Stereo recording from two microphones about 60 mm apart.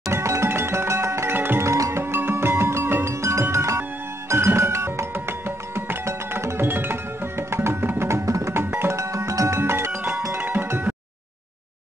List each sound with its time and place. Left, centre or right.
0.1 s music: right
1.3 s music: right
1.6 s music: right
8.1 s music: right
8.6 s music: right
8.9 s music: right
9.6 s music: right
10.4 s music: right